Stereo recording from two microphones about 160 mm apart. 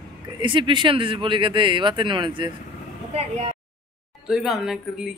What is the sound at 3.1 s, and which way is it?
Speech, 40° right (ahead or behind).